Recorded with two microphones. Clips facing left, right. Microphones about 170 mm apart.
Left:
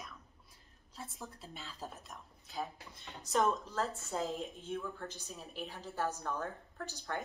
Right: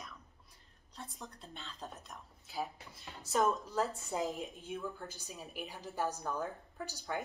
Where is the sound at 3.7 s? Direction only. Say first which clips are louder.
Right 2 dB; 15° right (ahead or behind).